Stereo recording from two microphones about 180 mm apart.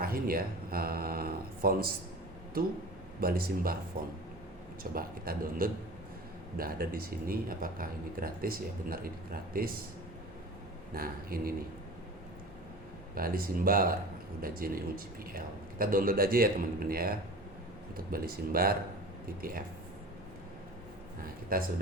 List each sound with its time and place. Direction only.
0.0 s speech: 55° right (ahead or behind)
3.2 s speech: 55° right (ahead or behind)
4.8 s speech: 55° right (ahead or behind)
10.9 s speech: 55° right (ahead or behind)
13.1 s speech: 55° right (ahead or behind)
21.5 s speech: 55° right (ahead or behind)